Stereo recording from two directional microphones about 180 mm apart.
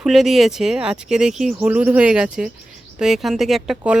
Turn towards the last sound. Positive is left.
turn(degrees=-5)  # may be behind; listen again after turning